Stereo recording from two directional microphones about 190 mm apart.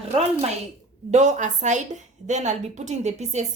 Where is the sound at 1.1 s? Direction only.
40° right (ahead or behind).